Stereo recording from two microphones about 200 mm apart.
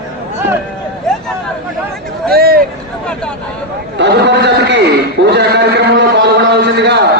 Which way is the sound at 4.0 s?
60° right (ahead or behind).